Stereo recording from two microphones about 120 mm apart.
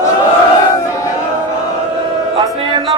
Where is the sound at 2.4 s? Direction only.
45° right (ahead or behind).